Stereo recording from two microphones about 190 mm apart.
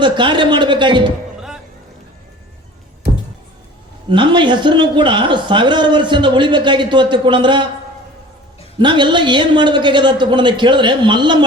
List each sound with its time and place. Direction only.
0.0 s a man's voice: 25° right (ahead or behind)
4.1 s a man's voice: 25° right (ahead or behind)
8.8 s a man's voice: 25° right (ahead or behind)